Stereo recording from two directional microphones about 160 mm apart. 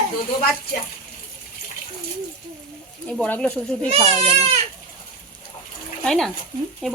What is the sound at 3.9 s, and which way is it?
Speech, 40° right (ahead or behind).